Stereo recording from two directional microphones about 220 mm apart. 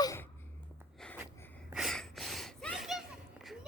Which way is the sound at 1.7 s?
Centre (ahead or behind).